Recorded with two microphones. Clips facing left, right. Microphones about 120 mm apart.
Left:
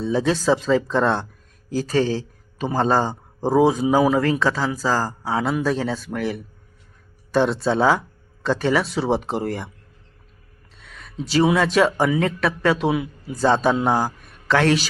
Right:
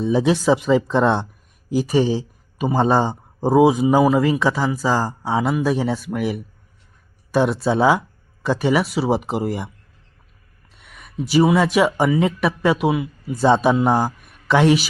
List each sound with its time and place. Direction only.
0.0 s a man's voice: 15° right (ahead or behind)
10.8 s a sound: 15° right (ahead or behind)
11.5 s a man's voice: 10° right (ahead or behind)
13.4 s a man's voice: 15° right (ahead or behind)
13.7 s a man's voice: 5° left (ahead or behind)
14.3 s a sound: 15° right (ahead or behind)